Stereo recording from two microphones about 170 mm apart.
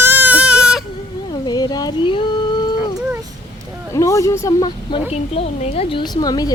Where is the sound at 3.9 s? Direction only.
20° left (ahead or behind); by 6.0 s 35° left (ahead or behind).